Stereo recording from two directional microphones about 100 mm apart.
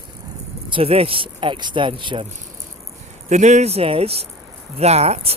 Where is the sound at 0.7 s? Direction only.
80° right; by 2.2 s 55° right (ahead or behind).